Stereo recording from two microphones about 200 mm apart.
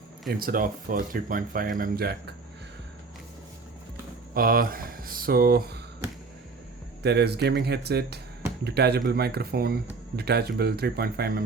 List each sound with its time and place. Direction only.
0.3 s speech: 45° right (ahead or behind)
4.4 s speech: 45° right (ahead or behind)
7.0 s speech: 55° right (ahead or behind)